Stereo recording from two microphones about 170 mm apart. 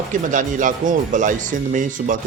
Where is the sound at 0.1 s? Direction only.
50° right (ahead or behind).